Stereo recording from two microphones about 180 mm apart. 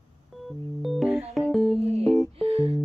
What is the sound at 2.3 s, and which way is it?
Music, 35° right (ahead or behind).